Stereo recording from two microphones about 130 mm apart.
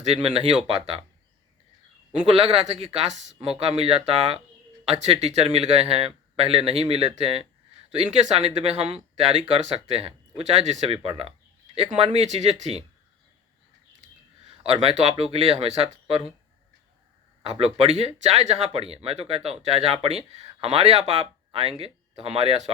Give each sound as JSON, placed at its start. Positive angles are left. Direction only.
{"t": 0.0, "sound": "speech", "side_deg": -50}
{"t": 2.2, "sound": "speech", "side_deg": -50}
{"t": 14.6, "sound": "speech", "side_deg": -50}
{"t": 17.5, "sound": "speech", "side_deg": -50}